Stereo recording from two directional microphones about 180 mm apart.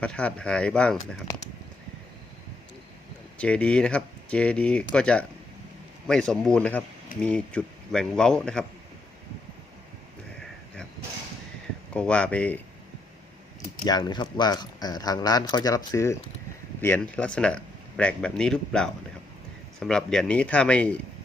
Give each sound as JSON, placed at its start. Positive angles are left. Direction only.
{"t": 0.0, "sound": "speech", "side_deg": 5}
{"t": 3.3, "sound": "speech", "side_deg": 5}
{"t": 11.9, "sound": "speech", "side_deg": 5}
{"t": 13.8, "sound": "speech", "side_deg": 25}